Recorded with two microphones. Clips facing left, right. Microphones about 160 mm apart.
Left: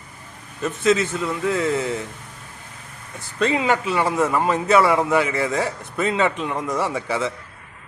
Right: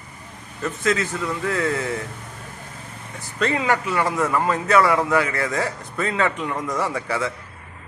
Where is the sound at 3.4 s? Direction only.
20° left (ahead or behind).